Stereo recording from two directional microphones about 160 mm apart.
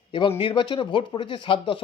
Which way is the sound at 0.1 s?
30° left (ahead or behind).